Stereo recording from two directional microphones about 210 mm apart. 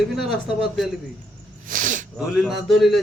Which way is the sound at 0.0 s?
Centre (ahead or behind).